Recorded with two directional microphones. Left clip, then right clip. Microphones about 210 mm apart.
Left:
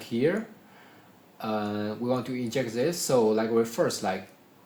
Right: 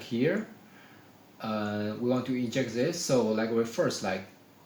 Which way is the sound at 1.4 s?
45° left (ahead or behind).